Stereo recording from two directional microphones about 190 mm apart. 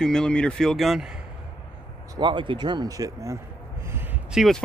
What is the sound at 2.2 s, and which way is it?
Speech, 25° right (ahead or behind).